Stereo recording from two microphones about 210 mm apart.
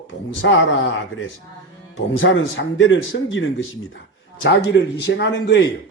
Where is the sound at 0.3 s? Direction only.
65° left (ahead or behind).